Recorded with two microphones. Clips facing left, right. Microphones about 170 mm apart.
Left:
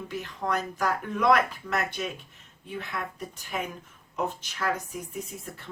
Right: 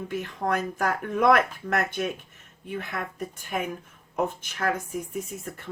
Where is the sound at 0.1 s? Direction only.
50° right (ahead or behind).